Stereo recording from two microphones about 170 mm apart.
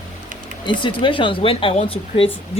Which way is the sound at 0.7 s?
30° left (ahead or behind).